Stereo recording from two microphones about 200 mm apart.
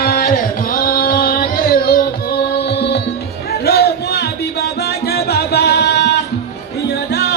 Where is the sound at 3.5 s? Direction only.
55° left (ahead or behind).